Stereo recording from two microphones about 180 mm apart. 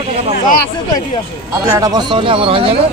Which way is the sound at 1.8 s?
25° right (ahead or behind).